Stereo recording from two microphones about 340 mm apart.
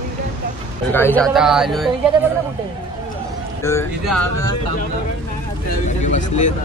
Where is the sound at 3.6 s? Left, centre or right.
Centre.